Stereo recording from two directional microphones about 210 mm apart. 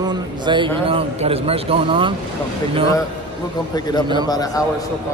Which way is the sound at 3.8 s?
20° left (ahead or behind).